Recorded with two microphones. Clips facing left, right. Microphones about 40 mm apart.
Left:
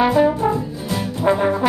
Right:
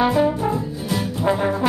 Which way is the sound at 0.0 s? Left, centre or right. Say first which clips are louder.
Left 3 dB; centre.